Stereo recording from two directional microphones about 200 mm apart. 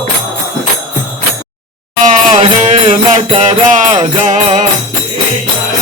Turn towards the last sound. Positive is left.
turn(degrees=-35)  # may be behind; listen again after turning